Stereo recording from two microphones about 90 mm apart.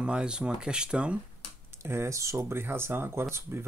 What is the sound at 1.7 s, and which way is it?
Speech, 30° right (ahead or behind).